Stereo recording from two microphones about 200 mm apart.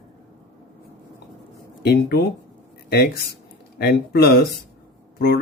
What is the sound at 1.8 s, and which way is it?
Speech, 55° left (ahead or behind).